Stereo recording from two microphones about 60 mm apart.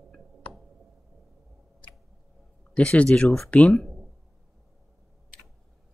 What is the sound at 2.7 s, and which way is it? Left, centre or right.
Speech, centre.